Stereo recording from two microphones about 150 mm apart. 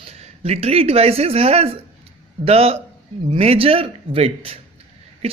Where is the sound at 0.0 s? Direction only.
40° right (ahead or behind).